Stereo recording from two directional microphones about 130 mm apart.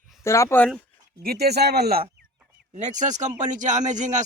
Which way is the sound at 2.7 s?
65° right (ahead or behind).